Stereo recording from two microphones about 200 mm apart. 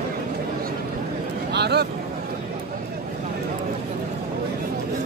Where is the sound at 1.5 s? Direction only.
55° right (ahead or behind).